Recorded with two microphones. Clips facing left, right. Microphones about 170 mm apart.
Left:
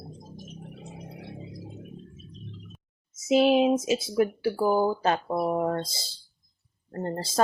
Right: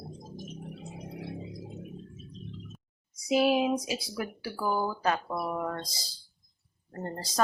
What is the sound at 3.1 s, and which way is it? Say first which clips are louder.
Speech: left 4 dB; 25° left (ahead or behind).